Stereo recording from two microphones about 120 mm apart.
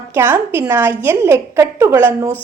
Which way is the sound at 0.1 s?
20° right (ahead or behind).